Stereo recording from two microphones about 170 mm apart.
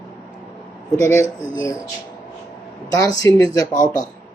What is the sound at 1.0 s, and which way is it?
Speech, 15° left (ahead or behind).